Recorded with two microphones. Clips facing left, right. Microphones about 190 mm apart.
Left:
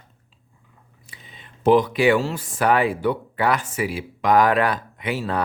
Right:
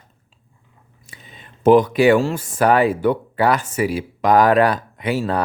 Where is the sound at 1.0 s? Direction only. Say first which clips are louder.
Right 3 dB; 45° right (ahead or behind).